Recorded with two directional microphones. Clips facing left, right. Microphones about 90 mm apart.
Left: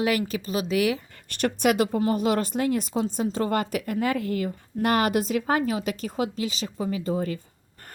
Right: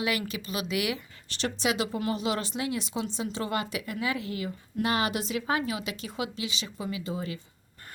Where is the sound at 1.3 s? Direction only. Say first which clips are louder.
Left 6 dB; 50° left (ahead or behind).